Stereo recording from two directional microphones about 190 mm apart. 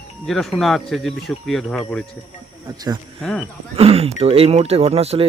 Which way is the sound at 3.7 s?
30° right (ahead or behind).